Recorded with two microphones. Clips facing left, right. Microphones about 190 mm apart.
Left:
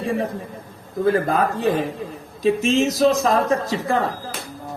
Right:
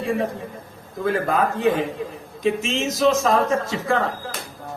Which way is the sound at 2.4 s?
35° left (ahead or behind).